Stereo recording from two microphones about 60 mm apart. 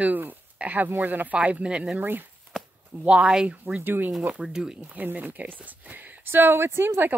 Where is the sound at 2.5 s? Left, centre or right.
Centre.